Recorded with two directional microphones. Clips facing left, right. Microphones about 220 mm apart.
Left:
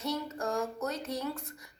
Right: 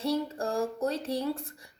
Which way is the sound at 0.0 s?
30° right (ahead or behind).